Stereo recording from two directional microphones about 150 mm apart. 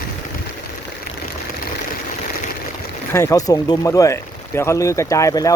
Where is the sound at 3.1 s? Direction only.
20° left (ahead or behind).